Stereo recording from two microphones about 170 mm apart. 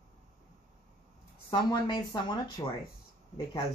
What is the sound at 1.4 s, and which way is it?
Speech, 25° left (ahead or behind).